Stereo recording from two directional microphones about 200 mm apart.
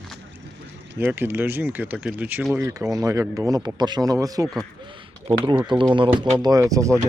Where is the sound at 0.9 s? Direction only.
10° right (ahead or behind).